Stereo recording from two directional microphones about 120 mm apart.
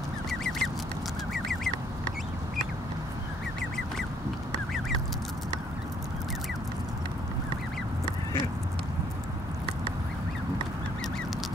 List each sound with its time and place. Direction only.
0.3 s duck: centre (ahead or behind)
1.3 s bird: centre (ahead or behind)